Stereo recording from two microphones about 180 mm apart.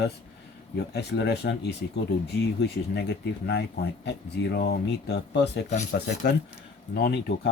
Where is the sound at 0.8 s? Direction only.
65° left (ahead or behind).